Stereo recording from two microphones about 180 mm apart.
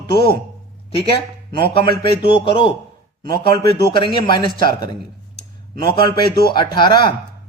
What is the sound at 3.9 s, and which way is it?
A man's voice, 25° left (ahead or behind).